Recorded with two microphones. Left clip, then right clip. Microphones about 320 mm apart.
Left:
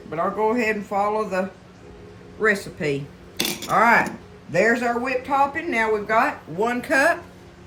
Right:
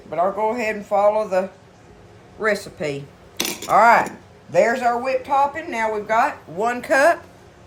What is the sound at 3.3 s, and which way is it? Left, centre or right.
Dishes, centre.